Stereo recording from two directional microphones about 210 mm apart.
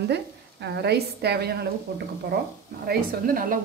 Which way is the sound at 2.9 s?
40° right (ahead or behind).